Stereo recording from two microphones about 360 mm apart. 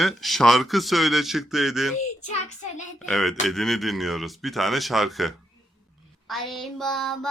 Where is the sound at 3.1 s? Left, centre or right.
Centre.